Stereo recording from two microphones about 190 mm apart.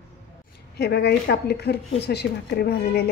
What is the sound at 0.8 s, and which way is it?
Speech, 60° left (ahead or behind).